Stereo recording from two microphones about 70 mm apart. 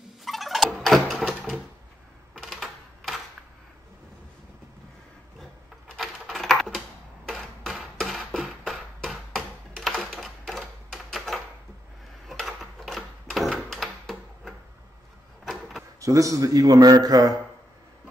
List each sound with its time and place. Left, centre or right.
0.2 s fowl: centre
2.3 s typewriter: centre
5.9 s typing: centre
7.2 s a sound: centre
16.0 s a man's voice: right